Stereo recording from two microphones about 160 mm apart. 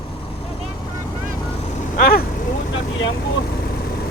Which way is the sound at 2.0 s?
70° left (ahead or behind).